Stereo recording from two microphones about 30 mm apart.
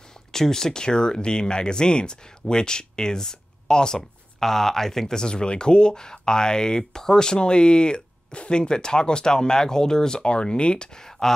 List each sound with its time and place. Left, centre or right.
0.3 s speech: centre
4.4 s speech: centre
5.3 s speech: left
11.0 s speech: centre